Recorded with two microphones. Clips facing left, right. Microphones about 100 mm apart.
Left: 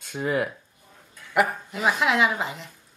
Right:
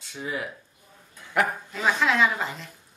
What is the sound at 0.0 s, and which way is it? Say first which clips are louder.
Speech: left 7 dB; 55° left (ahead or behind).